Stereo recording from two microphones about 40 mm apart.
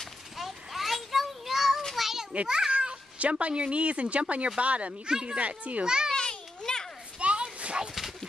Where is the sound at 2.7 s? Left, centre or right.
Right.